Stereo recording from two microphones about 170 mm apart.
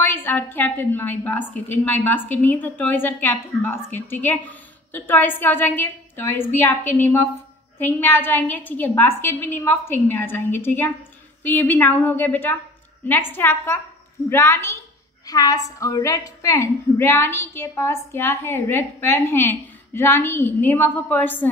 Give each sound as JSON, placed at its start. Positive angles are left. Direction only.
{"t": 0.0, "sound": "a woman's voice", "side_deg": 15}